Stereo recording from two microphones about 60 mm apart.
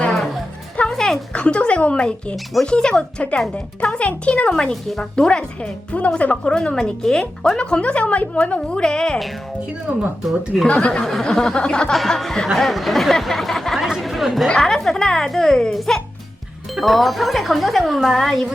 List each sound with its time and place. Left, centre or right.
0.8 s dog: centre
1.3 s speech: centre
2.3 s speech: centre
2.6 s speech: centre
4.7 s speech: centre
10.7 s speech: centre
11.0 s speech: centre
11.9 s speech: centre
13.8 s chatter: centre
14.4 s speech: centre